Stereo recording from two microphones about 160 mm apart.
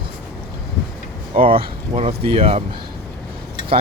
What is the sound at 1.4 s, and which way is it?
Speech, 35° right (ahead or behind).